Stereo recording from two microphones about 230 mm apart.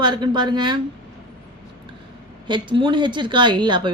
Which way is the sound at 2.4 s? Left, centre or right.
Right.